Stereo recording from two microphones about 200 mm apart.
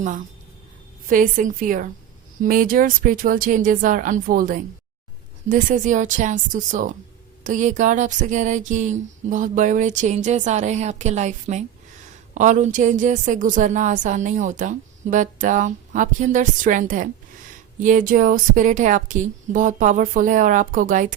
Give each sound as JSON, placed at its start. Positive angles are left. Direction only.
{"t": 1.0, "sound": "a woman's voice", "side_deg": -40}